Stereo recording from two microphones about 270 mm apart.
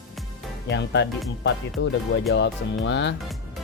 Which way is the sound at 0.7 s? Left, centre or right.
Left.